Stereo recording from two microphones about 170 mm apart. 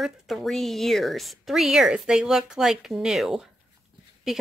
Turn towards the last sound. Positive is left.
turn(degrees=0)  # may be behind; listen again after turning